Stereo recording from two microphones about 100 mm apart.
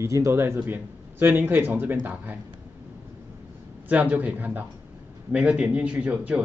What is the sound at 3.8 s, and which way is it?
A man's voice, 15° right (ahead or behind).